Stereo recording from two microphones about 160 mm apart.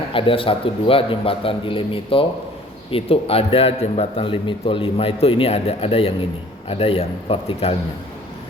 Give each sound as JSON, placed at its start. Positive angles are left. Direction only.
{"t": 0.1, "sound": "a man's voice", "side_deg": 35}